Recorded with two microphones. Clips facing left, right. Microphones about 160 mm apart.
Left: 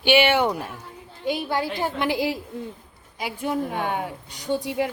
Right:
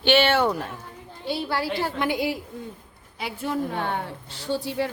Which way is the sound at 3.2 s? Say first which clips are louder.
Left 1 dB; 15° left (ahead or behind).